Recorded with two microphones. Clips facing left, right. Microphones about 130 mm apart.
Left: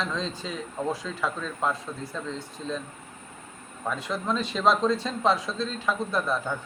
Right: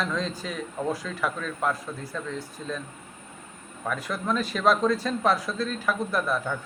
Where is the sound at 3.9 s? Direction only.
25° left (ahead or behind).